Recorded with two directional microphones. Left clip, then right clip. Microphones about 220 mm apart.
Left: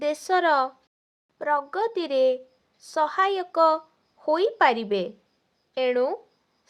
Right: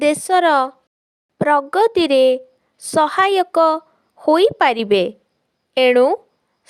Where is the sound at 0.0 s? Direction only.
40° right (ahead or behind).